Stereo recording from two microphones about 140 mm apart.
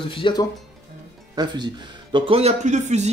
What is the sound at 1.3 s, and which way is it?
A man's voice, 30° right (ahead or behind).